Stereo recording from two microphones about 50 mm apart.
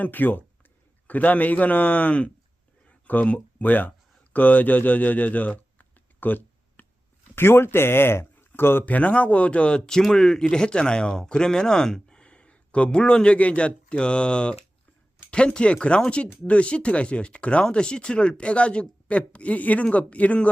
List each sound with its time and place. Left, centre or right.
0.0 s a man's voice: left
3.1 s a sound: left
7.3 s speech: left
8.9 s speech: left